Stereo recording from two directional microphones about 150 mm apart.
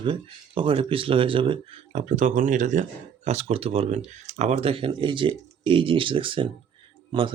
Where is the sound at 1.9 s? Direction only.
50° right (ahead or behind).